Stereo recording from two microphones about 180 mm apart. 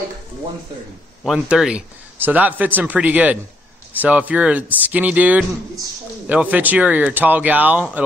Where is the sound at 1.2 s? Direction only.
Centre (ahead or behind).